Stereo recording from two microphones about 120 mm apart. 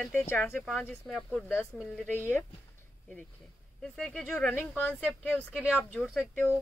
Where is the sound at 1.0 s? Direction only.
5° left (ahead or behind).